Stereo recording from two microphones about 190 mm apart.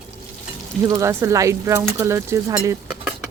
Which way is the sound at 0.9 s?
15° right (ahead or behind).